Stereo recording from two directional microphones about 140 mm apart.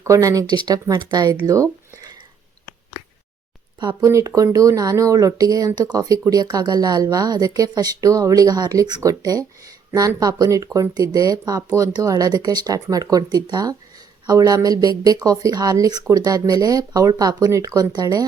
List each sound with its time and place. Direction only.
0.0 s speech: 25° right (ahead or behind)
2.0 s a sound: 30° right (ahead or behind)
3.8 s speech: 30° right (ahead or behind)